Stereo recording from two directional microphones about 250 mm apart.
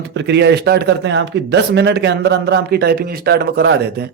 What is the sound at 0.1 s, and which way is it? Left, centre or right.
A man's voice, right.